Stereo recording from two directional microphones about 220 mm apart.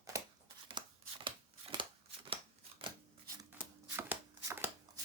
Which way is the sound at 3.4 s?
10° right (ahead or behind).